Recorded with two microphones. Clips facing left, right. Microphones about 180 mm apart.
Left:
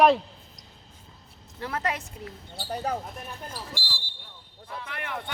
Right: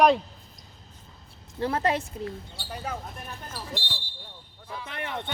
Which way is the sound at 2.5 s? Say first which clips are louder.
Left 10 dB; 40° left (ahead or behind).